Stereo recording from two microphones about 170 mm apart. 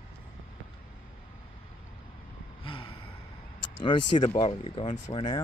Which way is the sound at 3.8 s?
30° left (ahead or behind).